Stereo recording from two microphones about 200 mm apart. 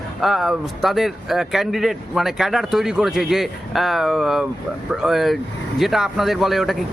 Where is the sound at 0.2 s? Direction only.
Centre (ahead or behind).